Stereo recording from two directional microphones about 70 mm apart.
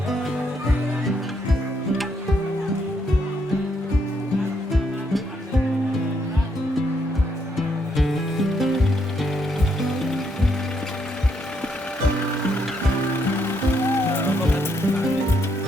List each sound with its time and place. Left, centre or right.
7.9 s music: centre
9.8 s music: centre
13.8 s music: left